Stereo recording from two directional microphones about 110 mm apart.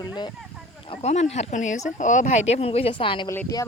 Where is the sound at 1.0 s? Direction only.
90° left; by 3.2 s 50° left (ahead or behind).